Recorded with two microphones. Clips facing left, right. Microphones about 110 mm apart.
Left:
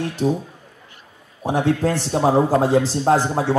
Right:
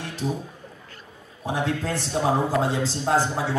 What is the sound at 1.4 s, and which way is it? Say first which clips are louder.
Speech: left 7 dB; 40° left (ahead or behind).